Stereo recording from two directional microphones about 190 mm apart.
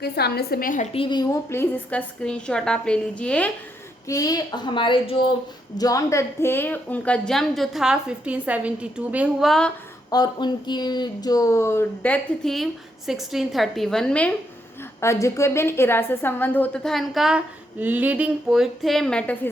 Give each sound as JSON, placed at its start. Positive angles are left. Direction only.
{"t": 0.0, "sound": "a woman's voice", "side_deg": 55}
{"t": 0.9, "sound": "a woman's voice", "side_deg": 25}
{"t": 4.0, "sound": "a woman's voice", "side_deg": 20}
{"t": 10.1, "sound": "a woman's voice", "side_deg": 20}